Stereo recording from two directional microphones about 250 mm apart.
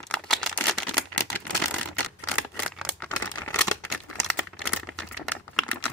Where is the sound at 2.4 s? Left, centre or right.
Centre.